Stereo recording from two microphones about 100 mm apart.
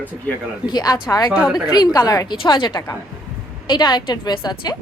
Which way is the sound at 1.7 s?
40° left (ahead or behind).